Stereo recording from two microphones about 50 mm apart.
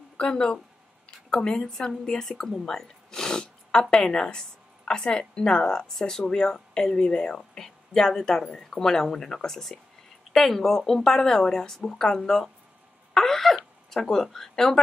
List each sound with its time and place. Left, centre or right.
0.2 s a woman's voice: centre
13.1 s a sound: centre
13.8 s speech: centre